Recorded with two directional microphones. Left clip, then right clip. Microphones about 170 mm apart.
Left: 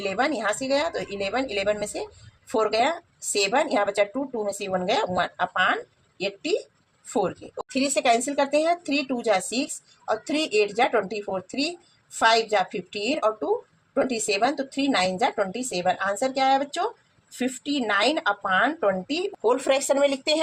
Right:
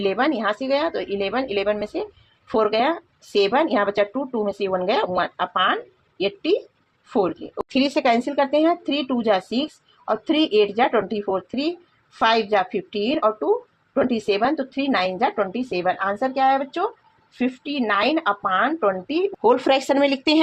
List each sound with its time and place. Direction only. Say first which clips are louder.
0.0 s speech: right 4 dB; 45° right (ahead or behind)
19.5 s speech: right 4 dB; 55° right (ahead or behind)